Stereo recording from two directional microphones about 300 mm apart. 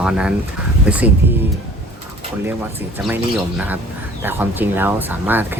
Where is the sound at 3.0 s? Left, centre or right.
Centre.